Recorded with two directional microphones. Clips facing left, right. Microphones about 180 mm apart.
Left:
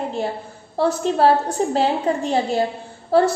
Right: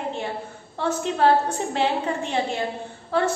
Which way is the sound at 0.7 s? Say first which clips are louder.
Left 5 dB; 35° left (ahead or behind).